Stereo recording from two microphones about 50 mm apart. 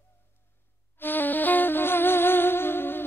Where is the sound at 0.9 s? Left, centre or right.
Left.